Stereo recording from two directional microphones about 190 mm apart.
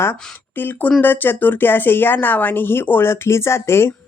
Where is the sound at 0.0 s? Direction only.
10° left (ahead or behind).